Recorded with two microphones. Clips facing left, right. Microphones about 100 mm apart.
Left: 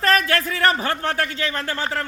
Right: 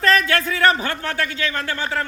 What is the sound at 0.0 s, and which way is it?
Speech, 50° left (ahead or behind).